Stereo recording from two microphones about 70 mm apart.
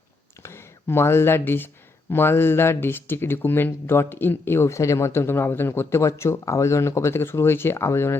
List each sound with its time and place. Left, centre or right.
0.4 s speech: left